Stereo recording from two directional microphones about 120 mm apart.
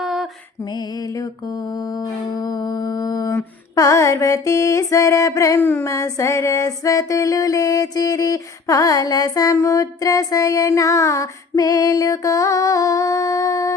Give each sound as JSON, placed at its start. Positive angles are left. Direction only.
{"t": 0.0, "sound": "mantra", "side_deg": 0}
{"t": 0.6, "sound": "mantra", "side_deg": 35}